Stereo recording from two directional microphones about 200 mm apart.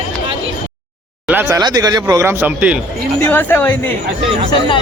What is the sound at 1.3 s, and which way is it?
Speech, 15° right (ahead or behind).